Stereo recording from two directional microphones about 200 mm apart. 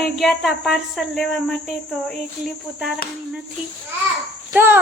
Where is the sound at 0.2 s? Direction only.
Centre (ahead or behind).